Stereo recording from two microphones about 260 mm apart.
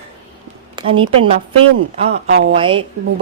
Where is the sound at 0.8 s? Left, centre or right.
Centre.